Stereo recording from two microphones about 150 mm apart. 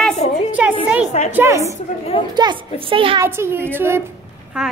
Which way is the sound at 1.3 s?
20° right (ahead or behind).